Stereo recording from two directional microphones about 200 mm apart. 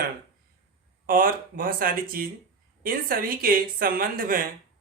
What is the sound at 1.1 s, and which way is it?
Speech, 45° right (ahead or behind).